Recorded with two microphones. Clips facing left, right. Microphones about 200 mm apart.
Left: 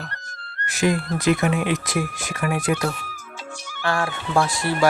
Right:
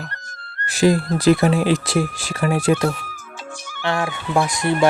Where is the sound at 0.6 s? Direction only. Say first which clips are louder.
Right 5 dB; 30° right (ahead or behind).